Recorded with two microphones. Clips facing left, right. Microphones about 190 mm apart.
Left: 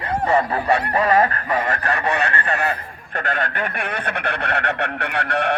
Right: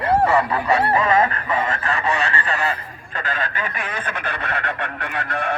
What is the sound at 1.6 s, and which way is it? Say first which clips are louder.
Speech: even; 65° left (ahead or behind).